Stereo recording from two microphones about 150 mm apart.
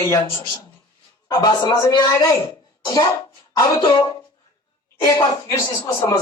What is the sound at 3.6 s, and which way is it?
A man's voice, 25° left (ahead or behind).